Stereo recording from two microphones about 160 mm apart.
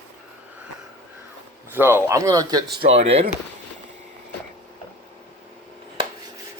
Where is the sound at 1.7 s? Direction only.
15° right (ahead or behind).